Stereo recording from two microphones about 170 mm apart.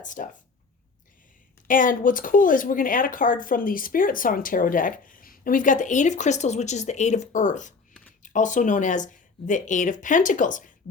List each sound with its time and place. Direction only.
0.0 s speech: 50° left (ahead or behind)
1.6 s speech: 50° left (ahead or behind)